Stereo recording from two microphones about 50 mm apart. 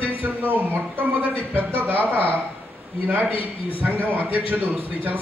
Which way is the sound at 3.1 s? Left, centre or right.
Right.